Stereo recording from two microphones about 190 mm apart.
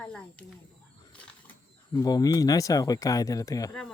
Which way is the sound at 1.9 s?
20° left (ahead or behind).